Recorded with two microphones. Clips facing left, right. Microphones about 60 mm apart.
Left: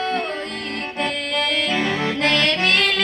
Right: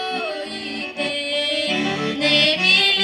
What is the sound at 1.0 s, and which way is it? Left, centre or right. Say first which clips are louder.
Music: left 1 dB; left.